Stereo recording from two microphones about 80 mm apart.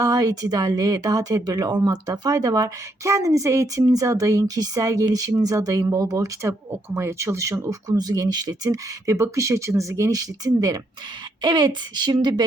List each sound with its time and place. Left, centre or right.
0.0 s speech: right
11.4 s speech: right